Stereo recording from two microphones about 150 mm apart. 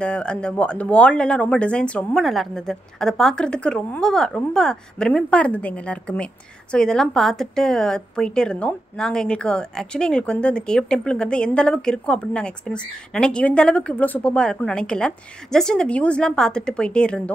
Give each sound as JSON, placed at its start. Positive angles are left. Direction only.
{"t": 0.0, "sound": "speech", "side_deg": 5}